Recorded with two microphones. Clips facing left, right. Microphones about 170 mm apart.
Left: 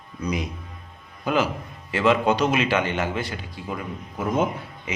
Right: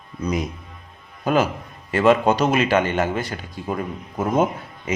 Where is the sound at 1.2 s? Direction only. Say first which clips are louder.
Right 3 dB; 45° right (ahead or behind).